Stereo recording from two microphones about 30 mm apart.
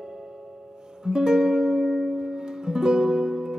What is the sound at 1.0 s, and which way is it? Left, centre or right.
Music, right.